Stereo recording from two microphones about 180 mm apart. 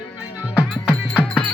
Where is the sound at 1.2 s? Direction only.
10° left (ahead or behind).